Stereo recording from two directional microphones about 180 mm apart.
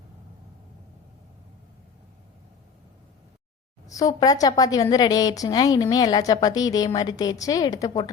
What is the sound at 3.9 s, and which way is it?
Speech, 20° left (ahead or behind).